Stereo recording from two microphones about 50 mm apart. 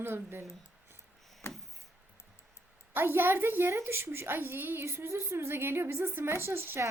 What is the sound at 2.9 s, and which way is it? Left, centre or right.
A child's voice, right.